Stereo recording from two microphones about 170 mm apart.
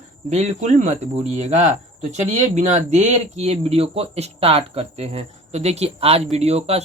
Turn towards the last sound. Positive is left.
turn(degrees=-35)  # may be behind; listen again after turning